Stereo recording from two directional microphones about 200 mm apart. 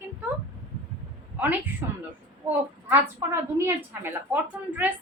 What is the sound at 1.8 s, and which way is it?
Speech, 15° right (ahead or behind).